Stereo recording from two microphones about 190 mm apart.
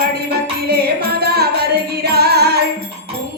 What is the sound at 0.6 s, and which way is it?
Music, 55° right (ahead or behind).